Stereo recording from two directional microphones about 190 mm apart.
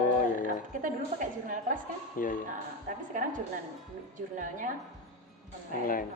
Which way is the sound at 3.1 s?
45° right (ahead or behind).